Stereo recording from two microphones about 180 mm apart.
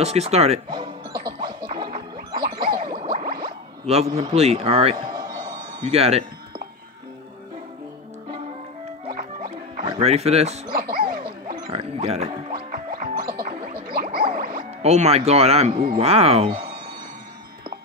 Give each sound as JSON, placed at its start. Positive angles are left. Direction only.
{"t": 0.0, "sound": "speech", "side_deg": -35}
{"t": 1.4, "sound": "music", "side_deg": -25}
{"t": 3.3, "sound": "a sound", "side_deg": -30}
{"t": 5.9, "sound": "speech", "side_deg": -35}
{"t": 9.8, "sound": "speech", "side_deg": -30}
{"t": 10.7, "sound": "dog", "side_deg": -55}
{"t": 11.7, "sound": "speech", "side_deg": -35}
{"t": 12.5, "sound": "music", "side_deg": -50}
{"t": 13.5, "sound": "a sound", "side_deg": -30}
{"t": 14.3, "sound": "music", "side_deg": -55}
{"t": 14.8, "sound": "speech", "side_deg": -35}
{"t": 16.4, "sound": "speech", "side_deg": -50}